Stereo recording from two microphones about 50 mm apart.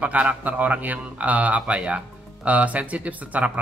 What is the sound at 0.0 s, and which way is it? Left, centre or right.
A man's voice, right.